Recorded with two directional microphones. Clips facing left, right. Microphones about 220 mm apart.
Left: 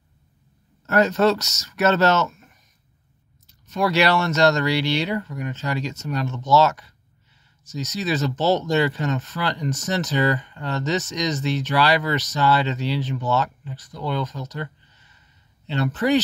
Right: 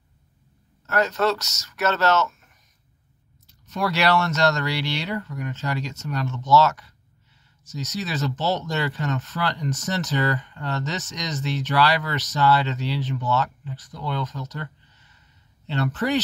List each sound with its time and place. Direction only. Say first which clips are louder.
0.8 s speech: left 4 dB; 20° left (ahead or behind)
3.8 s speech: left 2 dB; 15° left (ahead or behind)
8.4 s speech: left 5 dB; 45° left (ahead or behind)
8.6 s speech: left 5 dB; 15° left (ahead or behind)
15.7 s speech: left 3 dB; 15° left (ahead or behind)